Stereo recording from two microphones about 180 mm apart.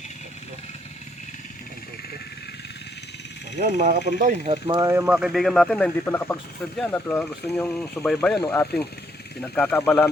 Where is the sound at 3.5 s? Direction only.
45° right (ahead or behind).